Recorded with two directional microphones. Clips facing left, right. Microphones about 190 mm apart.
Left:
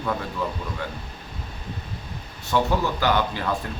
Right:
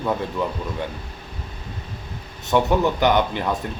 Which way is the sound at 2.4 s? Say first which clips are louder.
Right 4 dB; 20° right (ahead or behind).